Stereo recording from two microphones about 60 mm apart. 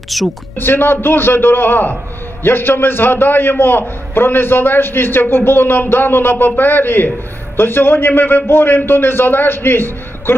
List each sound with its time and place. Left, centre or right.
0.1 s speech: centre
0.6 s a man's voice: left